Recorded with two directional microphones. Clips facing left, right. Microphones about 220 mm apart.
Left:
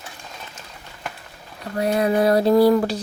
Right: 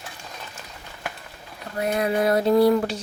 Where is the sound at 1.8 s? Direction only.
35° left (ahead or behind).